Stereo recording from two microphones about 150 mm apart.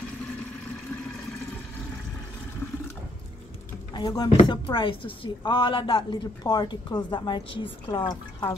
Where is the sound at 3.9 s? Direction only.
25° left (ahead or behind).